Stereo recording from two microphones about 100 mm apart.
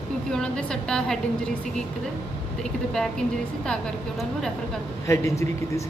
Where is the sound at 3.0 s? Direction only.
5° left (ahead or behind).